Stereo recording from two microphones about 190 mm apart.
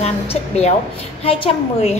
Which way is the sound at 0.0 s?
35° left (ahead or behind).